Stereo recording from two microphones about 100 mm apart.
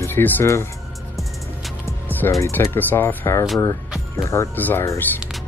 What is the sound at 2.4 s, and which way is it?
Speech, 25° left (ahead or behind).